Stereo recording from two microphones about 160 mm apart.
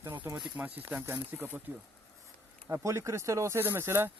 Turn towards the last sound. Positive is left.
turn(degrees=-15)  # may be behind; listen again after turning